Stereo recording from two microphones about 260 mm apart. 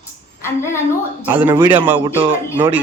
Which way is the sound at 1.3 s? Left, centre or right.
Centre.